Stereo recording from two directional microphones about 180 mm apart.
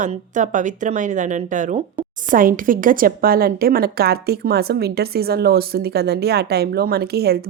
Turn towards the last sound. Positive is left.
turn(degrees=-60)  # may be behind; listen again after turning